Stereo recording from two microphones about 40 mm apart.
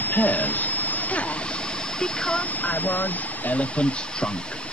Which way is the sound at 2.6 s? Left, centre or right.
Left.